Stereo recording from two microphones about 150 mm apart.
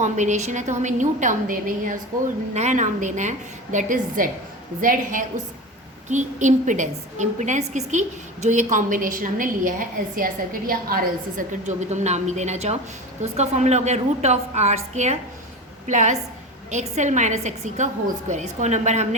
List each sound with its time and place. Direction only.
0.0 s a woman's voice: 50° right (ahead or behind)
2.5 s a woman's voice: 50° right (ahead or behind)
6.1 s a woman's voice: 55° right (ahead or behind)